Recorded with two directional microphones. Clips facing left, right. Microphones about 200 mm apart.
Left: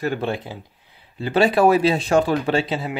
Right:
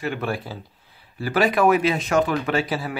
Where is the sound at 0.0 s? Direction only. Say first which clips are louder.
Left 3 dB; 35° left (ahead or behind).